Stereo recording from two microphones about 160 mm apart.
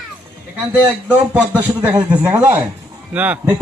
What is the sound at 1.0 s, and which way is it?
A man's voice, 10° right (ahead or behind).